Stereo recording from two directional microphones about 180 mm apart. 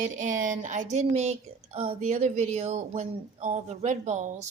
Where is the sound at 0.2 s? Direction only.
45° right (ahead or behind).